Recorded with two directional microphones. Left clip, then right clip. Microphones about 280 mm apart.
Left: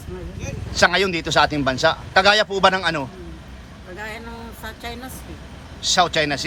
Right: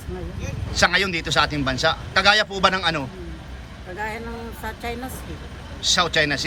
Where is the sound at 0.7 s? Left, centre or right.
Centre.